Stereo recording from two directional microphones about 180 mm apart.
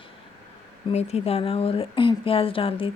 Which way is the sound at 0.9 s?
35° left (ahead or behind).